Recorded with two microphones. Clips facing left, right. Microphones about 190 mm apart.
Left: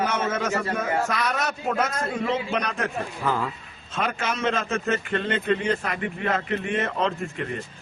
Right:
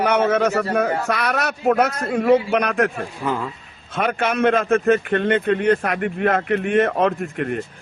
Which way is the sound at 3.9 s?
60° right (ahead or behind).